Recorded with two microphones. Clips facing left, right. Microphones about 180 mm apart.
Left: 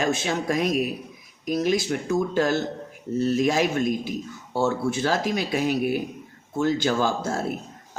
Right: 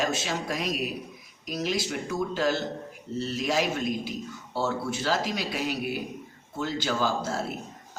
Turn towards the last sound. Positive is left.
turn(degrees=50)  # may be behind; listen again after turning